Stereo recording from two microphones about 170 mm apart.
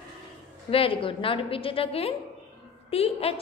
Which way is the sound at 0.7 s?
35° left (ahead or behind).